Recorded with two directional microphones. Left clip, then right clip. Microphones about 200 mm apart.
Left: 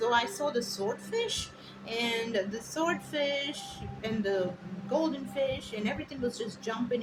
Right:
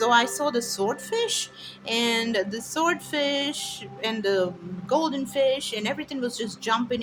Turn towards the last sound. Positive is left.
turn(degrees=-60)  # may be behind; listen again after turning